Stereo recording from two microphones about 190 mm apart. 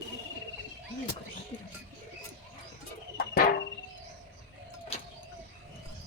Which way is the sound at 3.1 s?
55° left (ahead or behind).